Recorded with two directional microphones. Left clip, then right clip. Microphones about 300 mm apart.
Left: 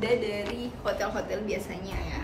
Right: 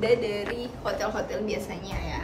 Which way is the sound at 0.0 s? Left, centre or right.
Centre.